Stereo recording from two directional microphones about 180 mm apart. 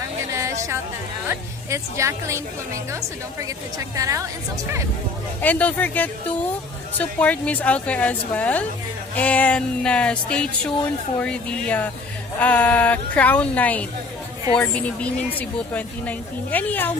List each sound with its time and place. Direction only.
0.3 s a sound: 15° right (ahead or behind)
1.3 s a woman's voice: 15° right (ahead or behind)
3.9 s a woman's voice: 20° right (ahead or behind)
5.4 s speech: 10° left (ahead or behind)